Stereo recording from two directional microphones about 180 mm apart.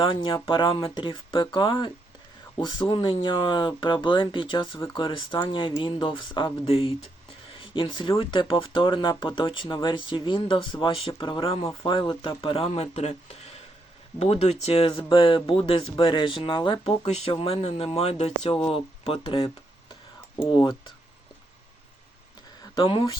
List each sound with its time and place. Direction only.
0.0 s speech: 30° left (ahead or behind)
20.5 s speech: 25° left (ahead or behind)
22.7 s speech: 25° left (ahead or behind)